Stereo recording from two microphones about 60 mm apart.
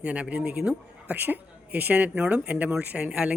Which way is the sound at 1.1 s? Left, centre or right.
Right.